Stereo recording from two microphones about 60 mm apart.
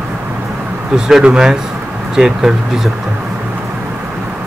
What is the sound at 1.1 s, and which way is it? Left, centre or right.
Speech, centre.